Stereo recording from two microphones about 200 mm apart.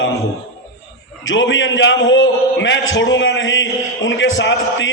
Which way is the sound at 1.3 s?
70° left (ahead or behind).